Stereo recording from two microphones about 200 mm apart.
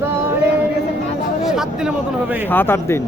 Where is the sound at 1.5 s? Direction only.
5° right (ahead or behind).